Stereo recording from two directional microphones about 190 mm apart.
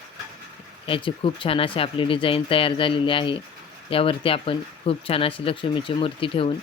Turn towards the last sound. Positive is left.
turn(degrees=30)  # may be behind; listen again after turning